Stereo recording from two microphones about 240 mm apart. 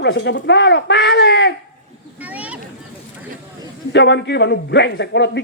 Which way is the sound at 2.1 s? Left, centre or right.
Centre.